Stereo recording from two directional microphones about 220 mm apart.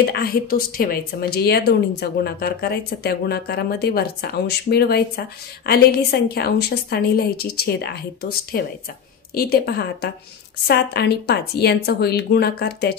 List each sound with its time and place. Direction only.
0.0 s speech: 45° left (ahead or behind)